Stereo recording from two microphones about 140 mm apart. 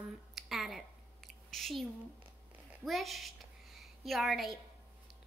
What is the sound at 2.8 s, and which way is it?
A woman's voice, centre (ahead or behind).